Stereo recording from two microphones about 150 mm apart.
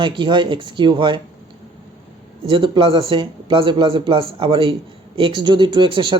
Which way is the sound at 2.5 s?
35° right (ahead or behind).